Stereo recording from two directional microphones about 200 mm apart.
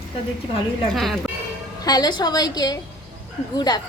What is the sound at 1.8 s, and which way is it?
Speech, 20° left (ahead or behind).